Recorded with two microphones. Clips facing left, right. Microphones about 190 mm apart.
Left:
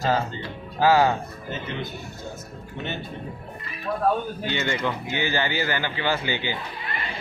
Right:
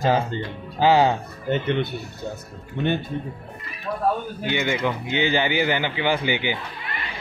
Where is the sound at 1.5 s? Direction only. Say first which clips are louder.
Right 10 dB; 65° right (ahead or behind).